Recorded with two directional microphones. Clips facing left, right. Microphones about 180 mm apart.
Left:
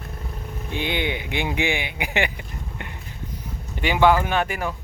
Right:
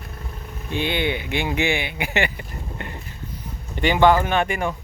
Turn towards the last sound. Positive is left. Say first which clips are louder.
# right 2 dB
turn(degrees=5)  # may be behind; listen again after turning